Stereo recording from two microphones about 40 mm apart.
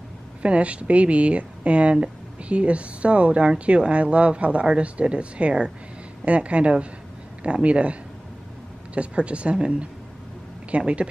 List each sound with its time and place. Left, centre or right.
0.4 s speech: right